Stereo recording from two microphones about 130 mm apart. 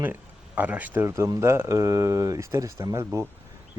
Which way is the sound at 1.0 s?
25° right (ahead or behind).